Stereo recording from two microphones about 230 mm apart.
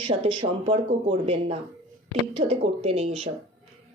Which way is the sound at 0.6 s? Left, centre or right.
Right.